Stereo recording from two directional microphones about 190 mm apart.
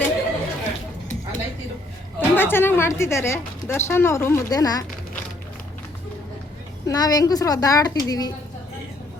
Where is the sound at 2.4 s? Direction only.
10° left (ahead or behind).